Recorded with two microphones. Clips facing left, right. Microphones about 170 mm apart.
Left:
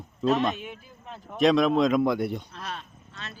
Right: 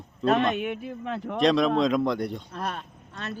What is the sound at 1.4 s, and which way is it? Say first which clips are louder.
Speech: left 1 dB; centre (ahead or behind).